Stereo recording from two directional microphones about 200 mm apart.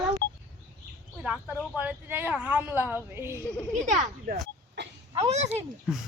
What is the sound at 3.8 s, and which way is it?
Speech, 40° right (ahead or behind).